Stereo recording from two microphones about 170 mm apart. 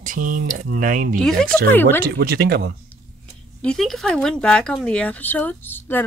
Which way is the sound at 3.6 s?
5° left (ahead or behind).